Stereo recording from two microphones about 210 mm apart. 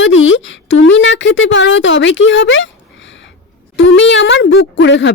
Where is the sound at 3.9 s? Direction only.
65° left (ahead or behind).